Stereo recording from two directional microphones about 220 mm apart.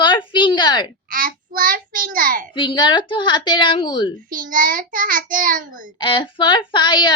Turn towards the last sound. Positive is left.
turn(degrees=20)  # may be behind; listen again after turning